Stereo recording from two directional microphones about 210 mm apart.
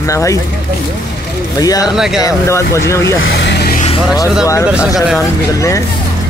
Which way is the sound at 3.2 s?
55° left (ahead or behind).